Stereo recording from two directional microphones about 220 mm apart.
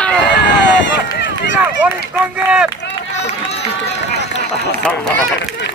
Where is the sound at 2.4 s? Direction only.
5° right (ahead or behind).